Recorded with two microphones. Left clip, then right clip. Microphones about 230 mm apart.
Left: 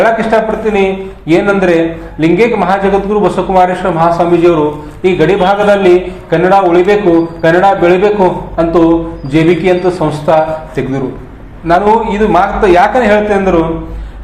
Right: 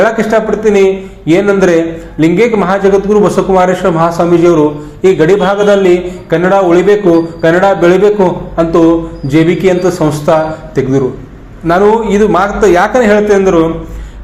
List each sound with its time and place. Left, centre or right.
0.0 s a man's voice: right